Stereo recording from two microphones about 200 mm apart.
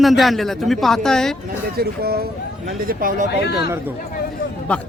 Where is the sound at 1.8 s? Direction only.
50° right (ahead or behind).